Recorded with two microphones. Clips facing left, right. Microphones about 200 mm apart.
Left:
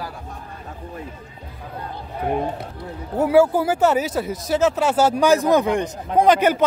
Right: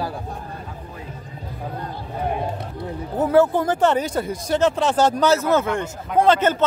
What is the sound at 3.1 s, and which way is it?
Speech, 10° left (ahead or behind).